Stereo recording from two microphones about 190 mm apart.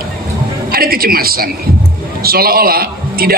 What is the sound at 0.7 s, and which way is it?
A woman's voice, 50° right (ahead or behind).